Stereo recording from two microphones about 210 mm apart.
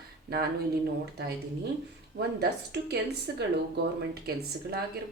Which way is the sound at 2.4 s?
50° right (ahead or behind).